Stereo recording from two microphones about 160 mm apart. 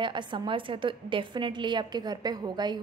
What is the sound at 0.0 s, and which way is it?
A woman's voice, 30° right (ahead or behind).